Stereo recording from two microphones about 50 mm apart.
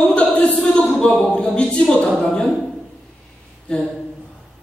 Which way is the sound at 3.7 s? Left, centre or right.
Centre.